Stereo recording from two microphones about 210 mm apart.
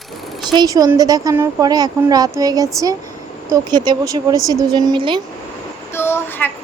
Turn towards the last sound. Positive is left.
turn(degrees=10)  # may be behind; listen again after turning